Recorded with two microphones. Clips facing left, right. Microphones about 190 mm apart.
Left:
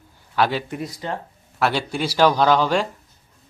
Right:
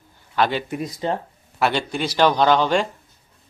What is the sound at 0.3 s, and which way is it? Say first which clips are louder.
Speech: even; 5° left (ahead or behind).